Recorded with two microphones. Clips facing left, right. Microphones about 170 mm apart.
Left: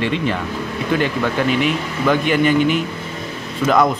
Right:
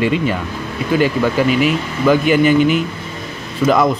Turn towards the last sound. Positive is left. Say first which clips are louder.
# right 2 dB
turn(degrees=0)  # may be behind; listen again after turning